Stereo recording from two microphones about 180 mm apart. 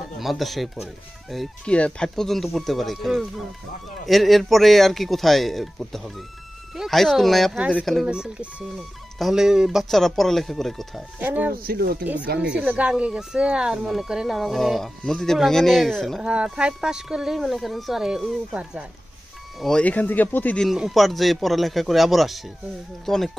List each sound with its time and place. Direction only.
0.2 s speech: centre (ahead or behind)
11.5 s speech: 55° right (ahead or behind)
12.4 s speech: 5° right (ahead or behind)
19.6 s speech: 5° left (ahead or behind)